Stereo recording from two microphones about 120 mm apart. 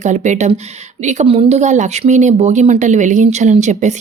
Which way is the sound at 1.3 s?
60° right (ahead or behind).